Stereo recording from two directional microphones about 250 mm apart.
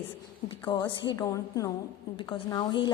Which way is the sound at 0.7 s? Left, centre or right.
Centre.